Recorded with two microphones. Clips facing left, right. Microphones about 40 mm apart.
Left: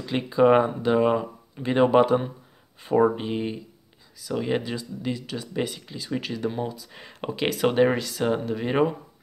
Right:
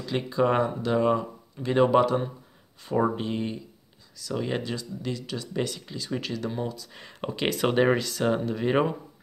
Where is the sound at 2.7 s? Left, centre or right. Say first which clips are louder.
Left 5 dB; left; by 8.9 s centre.